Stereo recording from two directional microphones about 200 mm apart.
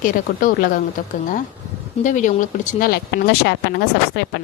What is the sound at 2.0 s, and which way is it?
Speech, 40° left (ahead or behind).